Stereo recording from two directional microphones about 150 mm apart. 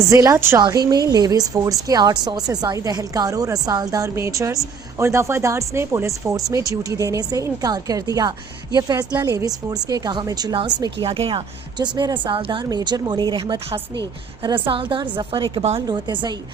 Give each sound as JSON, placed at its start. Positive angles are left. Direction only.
{"t": 0.0, "sound": "a woman's voice", "side_deg": -20}